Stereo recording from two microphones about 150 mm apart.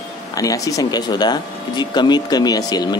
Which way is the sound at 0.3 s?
25° left (ahead or behind).